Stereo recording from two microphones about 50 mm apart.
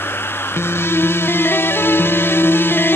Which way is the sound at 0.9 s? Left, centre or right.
Left.